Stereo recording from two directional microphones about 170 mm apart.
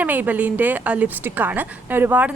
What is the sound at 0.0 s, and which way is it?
A woman's voice, 10° right (ahead or behind).